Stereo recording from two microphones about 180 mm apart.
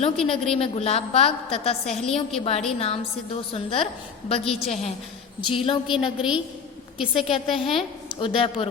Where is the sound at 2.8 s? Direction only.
30° left (ahead or behind).